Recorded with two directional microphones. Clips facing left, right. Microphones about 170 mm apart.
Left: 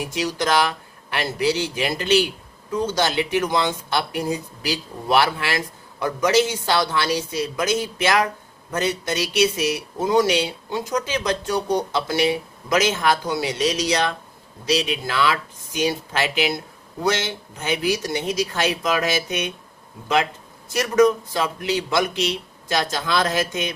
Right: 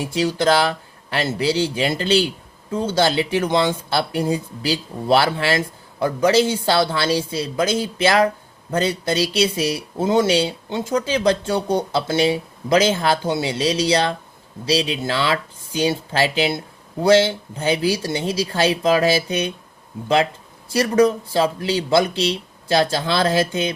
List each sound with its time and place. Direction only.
0.0 s speech: 30° right (ahead or behind)
20.7 s speech: 30° right (ahead or behind)